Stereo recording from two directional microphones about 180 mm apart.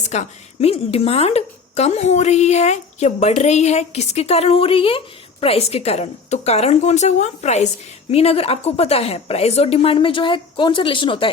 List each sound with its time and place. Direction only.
0.0 s a woman's voice: 40° left (ahead or behind)